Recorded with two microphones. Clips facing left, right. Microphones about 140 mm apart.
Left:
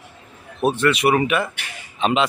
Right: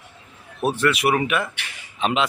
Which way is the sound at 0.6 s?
Centre (ahead or behind).